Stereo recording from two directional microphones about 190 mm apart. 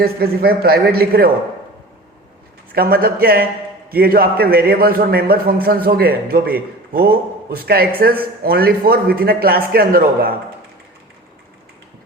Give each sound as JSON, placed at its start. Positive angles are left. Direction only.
{"t": 0.0, "sound": "a man's voice", "side_deg": -55}
{"t": 2.7, "sound": "a man's voice", "side_deg": -50}